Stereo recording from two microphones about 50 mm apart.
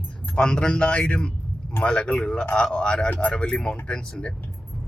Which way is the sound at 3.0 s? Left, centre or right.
Left.